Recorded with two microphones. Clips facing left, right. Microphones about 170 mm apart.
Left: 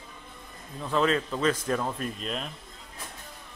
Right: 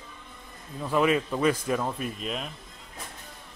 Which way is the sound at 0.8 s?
10° right (ahead or behind).